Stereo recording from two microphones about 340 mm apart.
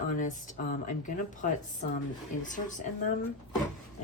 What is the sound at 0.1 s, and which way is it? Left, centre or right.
Speech, left.